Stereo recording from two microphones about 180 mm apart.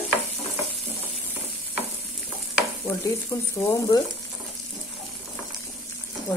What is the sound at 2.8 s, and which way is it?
Speech, 15° left (ahead or behind).